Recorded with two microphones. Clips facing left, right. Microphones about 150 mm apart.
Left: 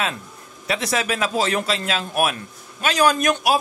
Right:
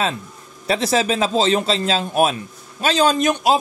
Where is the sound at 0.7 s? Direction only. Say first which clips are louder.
Right 5 dB; 30° right (ahead or behind).